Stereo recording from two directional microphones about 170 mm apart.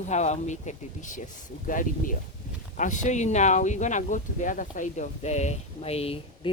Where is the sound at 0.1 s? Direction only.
40° left (ahead or behind).